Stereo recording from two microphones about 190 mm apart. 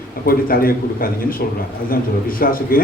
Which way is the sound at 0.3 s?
50° left (ahead or behind).